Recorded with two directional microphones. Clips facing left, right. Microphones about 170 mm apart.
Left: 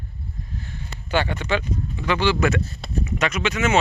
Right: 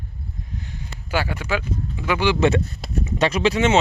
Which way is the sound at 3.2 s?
30° right (ahead or behind).